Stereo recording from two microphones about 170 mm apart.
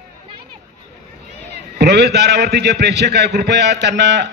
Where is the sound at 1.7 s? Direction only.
75° right (ahead or behind).